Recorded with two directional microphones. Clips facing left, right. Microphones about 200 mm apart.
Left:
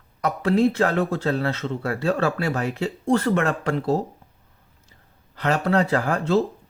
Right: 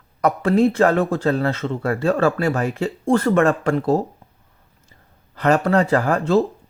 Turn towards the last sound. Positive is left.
turn(degrees=-45)  # may be behind; listen again after turning